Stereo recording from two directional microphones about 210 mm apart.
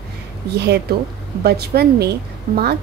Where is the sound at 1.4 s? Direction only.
50° right (ahead or behind).